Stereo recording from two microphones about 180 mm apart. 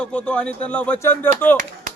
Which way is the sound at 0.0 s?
5° left (ahead or behind).